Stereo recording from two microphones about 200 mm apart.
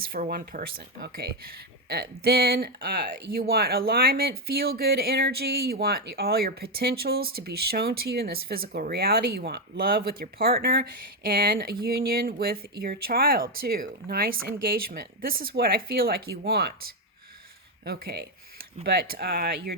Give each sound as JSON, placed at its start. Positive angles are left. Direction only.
{"t": 0.0, "sound": "speech", "side_deg": -50}
{"t": 17.8, "sound": "speech", "side_deg": -50}